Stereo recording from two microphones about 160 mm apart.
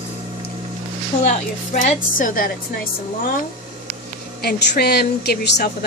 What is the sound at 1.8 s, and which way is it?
Speech, 60° left (ahead or behind).